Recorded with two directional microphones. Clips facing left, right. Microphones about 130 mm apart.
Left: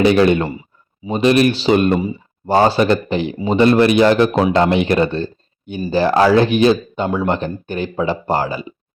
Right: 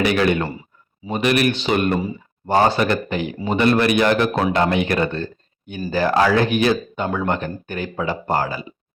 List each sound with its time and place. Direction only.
0.0 s speech: 25° left (ahead or behind)
5.1 s a sound: 25° left (ahead or behind)
5.9 s speech: 20° left (ahead or behind)